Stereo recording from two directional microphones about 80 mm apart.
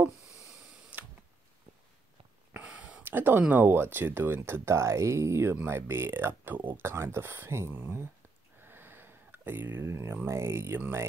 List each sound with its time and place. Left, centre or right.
2.5 s speech: centre